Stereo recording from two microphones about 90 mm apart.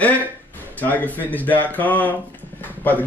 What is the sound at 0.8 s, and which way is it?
Speech, 20° left (ahead or behind).